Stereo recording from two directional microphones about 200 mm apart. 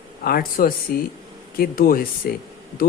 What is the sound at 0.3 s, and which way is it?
Speech, 45° left (ahead or behind).